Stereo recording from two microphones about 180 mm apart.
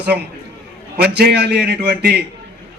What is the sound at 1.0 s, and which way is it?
A man's voice, 65° right (ahead or behind).